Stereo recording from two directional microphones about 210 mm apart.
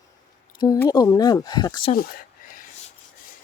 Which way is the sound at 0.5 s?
15° left (ahead or behind).